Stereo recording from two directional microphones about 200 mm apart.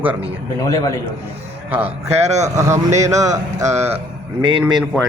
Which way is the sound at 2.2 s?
35° right (ahead or behind).